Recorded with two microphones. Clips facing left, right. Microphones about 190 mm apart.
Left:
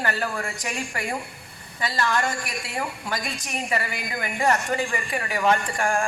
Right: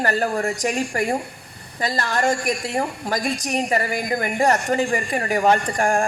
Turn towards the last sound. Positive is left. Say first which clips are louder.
# right 4 dB
turn(degrees=-40)  # may be behind; listen again after turning